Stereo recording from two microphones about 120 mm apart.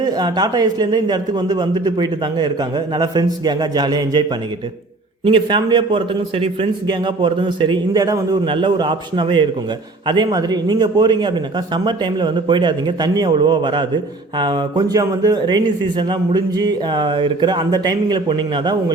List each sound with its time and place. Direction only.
0.0 s speech: 35° right (ahead or behind)